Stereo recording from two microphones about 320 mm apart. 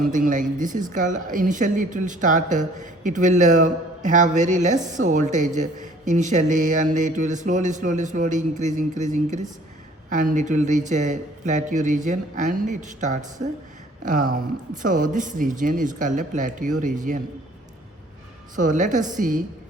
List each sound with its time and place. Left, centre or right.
0.0 s speech: right
18.5 s speech: right